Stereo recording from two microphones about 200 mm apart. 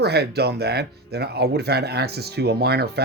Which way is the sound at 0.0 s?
55° right (ahead or behind).